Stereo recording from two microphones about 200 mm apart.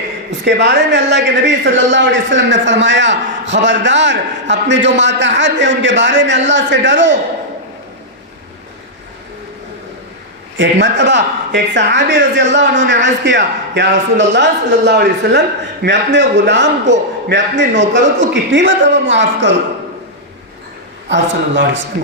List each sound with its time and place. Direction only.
0.3 s a man's voice: 60° right (ahead or behind)
10.6 s a man's voice: 60° right (ahead or behind)
21.1 s a man's voice: 60° right (ahead or behind)